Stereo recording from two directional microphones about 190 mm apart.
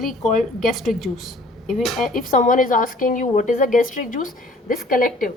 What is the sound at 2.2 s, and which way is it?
A woman's voice, 45° left (ahead or behind).